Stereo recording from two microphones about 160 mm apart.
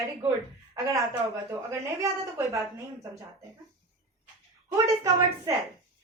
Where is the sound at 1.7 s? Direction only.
15° right (ahead or behind).